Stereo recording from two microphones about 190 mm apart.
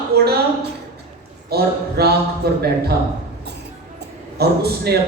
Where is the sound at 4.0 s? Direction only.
55° right (ahead or behind).